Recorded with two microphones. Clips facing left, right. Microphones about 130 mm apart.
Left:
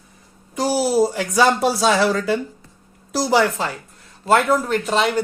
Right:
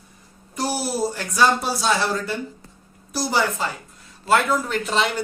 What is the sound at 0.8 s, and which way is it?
A man's voice, 90° left.